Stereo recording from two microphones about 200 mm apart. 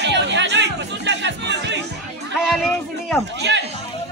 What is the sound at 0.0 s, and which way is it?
Music, 60° right (ahead or behind).